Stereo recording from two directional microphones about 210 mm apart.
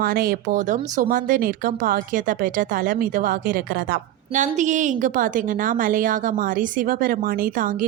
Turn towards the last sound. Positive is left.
turn(degrees=-40)  # may be behind; listen again after turning